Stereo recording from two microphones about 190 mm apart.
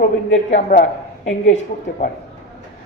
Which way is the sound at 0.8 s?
40° left (ahead or behind).